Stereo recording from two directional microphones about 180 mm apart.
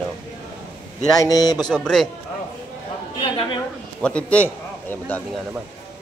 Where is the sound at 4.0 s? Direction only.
5° left (ahead or behind).